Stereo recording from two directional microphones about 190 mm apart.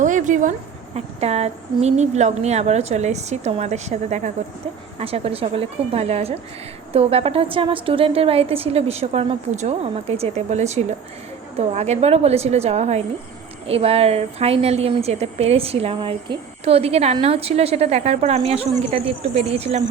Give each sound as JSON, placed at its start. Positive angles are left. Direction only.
{"t": 0.0, "sound": "a woman's voice", "side_deg": -40}